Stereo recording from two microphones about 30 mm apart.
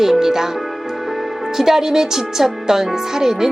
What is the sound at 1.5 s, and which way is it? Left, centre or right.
A woman's voice, centre.